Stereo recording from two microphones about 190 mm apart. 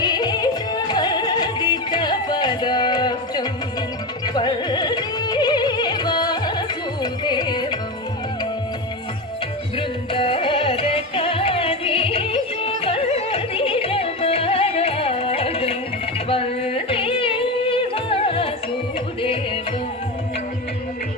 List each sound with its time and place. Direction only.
0.0 s music: 20° left (ahead or behind)
9.7 s music: 25° left (ahead or behind)